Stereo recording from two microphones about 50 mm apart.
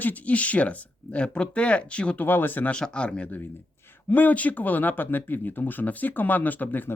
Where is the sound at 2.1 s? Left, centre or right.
Left.